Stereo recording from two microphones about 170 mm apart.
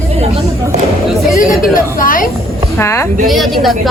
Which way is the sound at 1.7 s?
55° left (ahead or behind).